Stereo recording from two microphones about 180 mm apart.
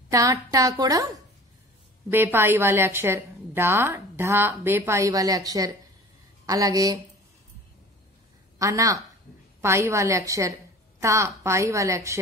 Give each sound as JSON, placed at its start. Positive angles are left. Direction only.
{"t": 0.1, "sound": "a woman's voice", "side_deg": -20}
{"t": 8.5, "sound": "a woman's voice", "side_deg": -20}